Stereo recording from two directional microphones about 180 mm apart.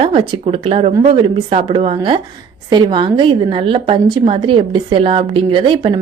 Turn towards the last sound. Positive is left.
turn(degrees=-30)  # may be behind; listen again after turning